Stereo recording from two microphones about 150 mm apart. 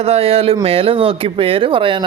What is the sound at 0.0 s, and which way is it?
Speech, 40° right (ahead or behind).